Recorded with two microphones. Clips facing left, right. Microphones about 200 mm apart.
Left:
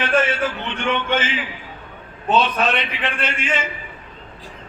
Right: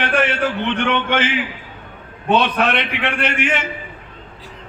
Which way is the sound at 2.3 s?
65° right (ahead or behind).